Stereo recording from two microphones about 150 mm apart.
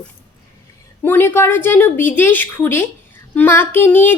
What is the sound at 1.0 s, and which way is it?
A child's voice, 15° left (ahead or behind).